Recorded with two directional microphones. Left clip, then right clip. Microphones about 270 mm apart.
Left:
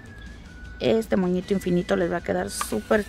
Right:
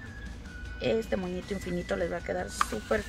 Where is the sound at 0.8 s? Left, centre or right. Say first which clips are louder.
Left 7 dB; left.